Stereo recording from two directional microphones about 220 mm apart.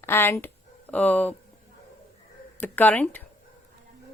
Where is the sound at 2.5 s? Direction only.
10° left (ahead or behind).